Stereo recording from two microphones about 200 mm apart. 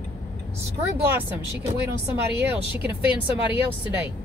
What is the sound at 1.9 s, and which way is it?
Speech, 55° right (ahead or behind).